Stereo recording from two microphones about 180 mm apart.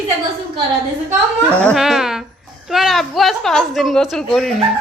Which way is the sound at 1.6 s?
Centre (ahead or behind).